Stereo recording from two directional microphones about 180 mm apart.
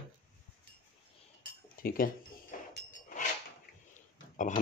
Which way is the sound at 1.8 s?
55° left (ahead or behind).